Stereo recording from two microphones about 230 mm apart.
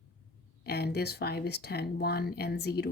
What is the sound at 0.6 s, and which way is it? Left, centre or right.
Speech, left.